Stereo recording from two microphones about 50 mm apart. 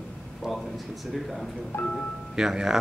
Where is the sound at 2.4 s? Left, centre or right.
Centre.